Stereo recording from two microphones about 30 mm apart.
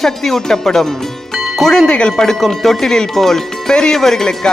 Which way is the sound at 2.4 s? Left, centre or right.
Centre.